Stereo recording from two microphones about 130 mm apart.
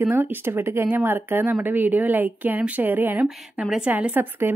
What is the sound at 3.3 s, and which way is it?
A woman's voice, 5° right (ahead or behind).